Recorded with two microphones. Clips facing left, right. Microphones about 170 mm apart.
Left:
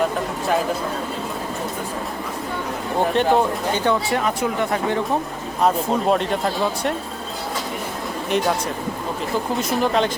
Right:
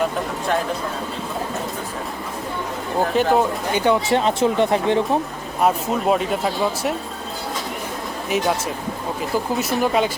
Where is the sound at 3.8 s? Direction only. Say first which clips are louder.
Right 4 dB; 20° right (ahead or behind).